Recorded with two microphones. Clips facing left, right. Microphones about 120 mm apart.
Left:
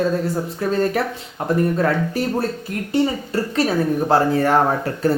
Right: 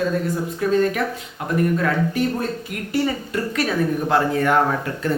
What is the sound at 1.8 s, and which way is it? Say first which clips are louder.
Speech: left 1 dB; 35° left (ahead or behind).